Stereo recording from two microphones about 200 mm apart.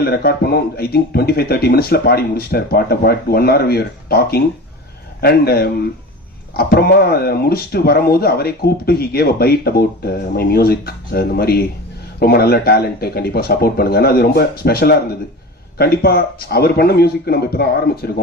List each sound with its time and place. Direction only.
0.0 s speech: 50° left (ahead or behind)